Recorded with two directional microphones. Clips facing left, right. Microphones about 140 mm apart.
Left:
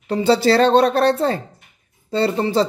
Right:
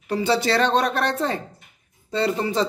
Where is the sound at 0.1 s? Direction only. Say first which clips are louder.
Left 5 dB; 30° left (ahead or behind).